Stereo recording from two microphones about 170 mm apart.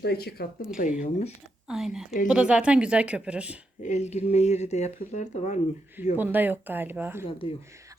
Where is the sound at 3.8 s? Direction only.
40° left (ahead or behind).